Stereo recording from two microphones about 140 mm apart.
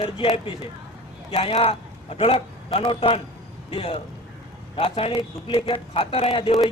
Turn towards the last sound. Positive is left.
turn(degrees=40)  # may be behind; listen again after turning